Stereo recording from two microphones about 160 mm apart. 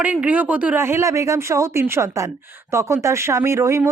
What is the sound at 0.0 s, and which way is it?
A woman's voice, 10° right (ahead or behind).